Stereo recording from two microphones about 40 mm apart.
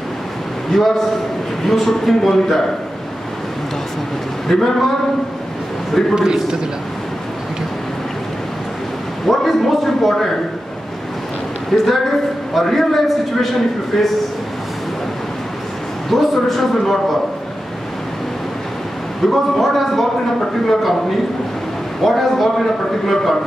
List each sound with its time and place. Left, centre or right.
0.7 s a man's voice: centre
4.5 s a man's voice: centre
6.1 s a man's voice: centre
9.2 s a sound: centre
11.7 s a man's voice: centre
16.1 s a man's voice: centre
19.2 s a man's voice: centre
22.0 s a man's voice: centre